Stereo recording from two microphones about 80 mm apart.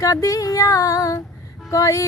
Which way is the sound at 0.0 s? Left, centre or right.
Left.